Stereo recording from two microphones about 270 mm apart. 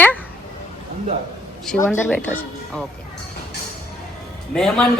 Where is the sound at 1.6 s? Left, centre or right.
Centre.